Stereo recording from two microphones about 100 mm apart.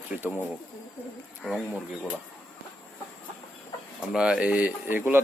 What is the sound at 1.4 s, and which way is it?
Speech, centre (ahead or behind).